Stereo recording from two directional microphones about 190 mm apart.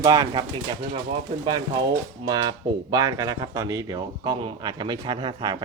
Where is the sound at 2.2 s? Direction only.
20° right (ahead or behind).